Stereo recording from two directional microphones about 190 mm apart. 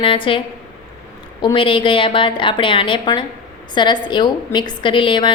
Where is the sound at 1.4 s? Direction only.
25° left (ahead or behind).